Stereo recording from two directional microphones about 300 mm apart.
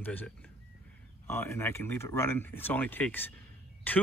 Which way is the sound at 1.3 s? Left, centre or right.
Centre.